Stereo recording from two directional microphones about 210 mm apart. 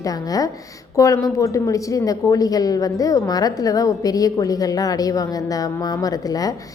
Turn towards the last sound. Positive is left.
turn(degrees=15)  # may be behind; listen again after turning